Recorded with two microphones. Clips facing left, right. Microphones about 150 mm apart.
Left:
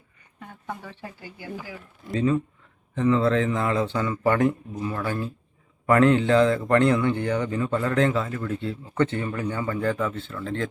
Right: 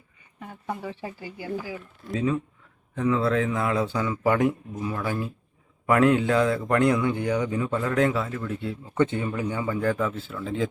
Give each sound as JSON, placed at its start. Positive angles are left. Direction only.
{"t": 0.3, "sound": "speech", "side_deg": -5}
{"t": 2.0, "sound": "a man's voice", "side_deg": 0}